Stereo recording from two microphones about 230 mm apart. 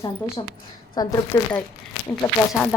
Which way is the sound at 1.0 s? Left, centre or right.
Centre.